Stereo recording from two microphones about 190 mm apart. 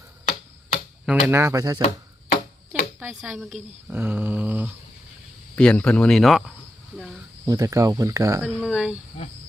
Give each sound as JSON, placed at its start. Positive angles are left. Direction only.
{"t": 1.0, "sound": "speech", "side_deg": -10}
{"t": 3.0, "sound": "speech", "side_deg": 0}
{"t": 5.5, "sound": "speech", "side_deg": 5}
{"t": 7.4, "sound": "speech", "side_deg": -15}
{"t": 8.4, "sound": "speech", "side_deg": -5}